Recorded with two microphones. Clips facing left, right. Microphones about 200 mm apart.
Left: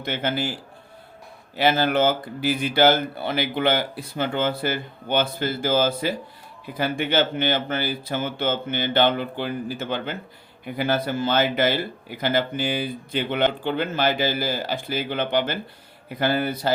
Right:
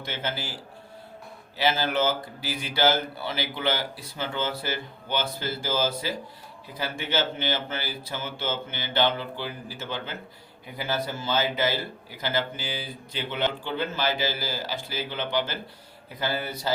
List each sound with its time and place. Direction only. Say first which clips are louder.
0.0 s speech: left 7 dB; 60° left (ahead or behind)
1.5 s speech: left 5 dB; 55° left (ahead or behind)